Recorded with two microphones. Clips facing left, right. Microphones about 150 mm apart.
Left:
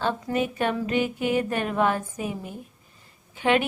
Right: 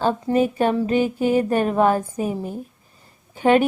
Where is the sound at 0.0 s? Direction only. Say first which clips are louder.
Right 6 dB; 35° right (ahead or behind).